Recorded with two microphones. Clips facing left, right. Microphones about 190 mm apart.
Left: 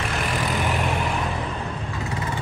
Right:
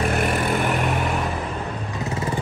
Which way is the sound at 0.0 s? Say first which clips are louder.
Right 5 dB; 55° right (ahead or behind).